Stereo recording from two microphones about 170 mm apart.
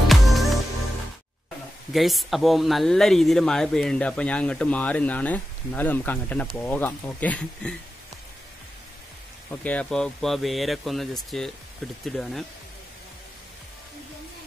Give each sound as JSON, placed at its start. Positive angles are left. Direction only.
{"t": 0.1, "sound": "music", "side_deg": 0}
{"t": 1.9, "sound": "speech", "side_deg": 0}
{"t": 9.6, "sound": "speech", "side_deg": 10}